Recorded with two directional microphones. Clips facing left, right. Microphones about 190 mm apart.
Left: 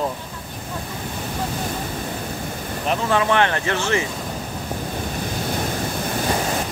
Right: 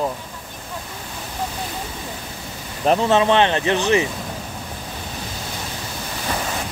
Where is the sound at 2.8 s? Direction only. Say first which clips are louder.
Right 4 dB; 25° right (ahead or behind).